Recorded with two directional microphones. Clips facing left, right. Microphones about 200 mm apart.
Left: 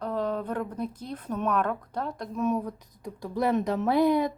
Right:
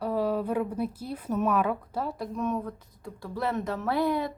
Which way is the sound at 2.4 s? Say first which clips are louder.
Left 5 dB; 15° left (ahead or behind).